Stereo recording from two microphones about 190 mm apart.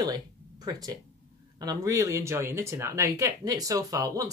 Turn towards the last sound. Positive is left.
turn(degrees=-20)  # may be behind; listen again after turning